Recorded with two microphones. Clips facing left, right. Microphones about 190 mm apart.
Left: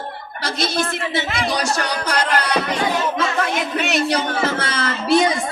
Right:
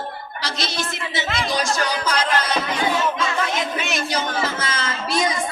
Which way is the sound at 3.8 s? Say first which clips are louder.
Left 5 dB; 65° left (ahead or behind).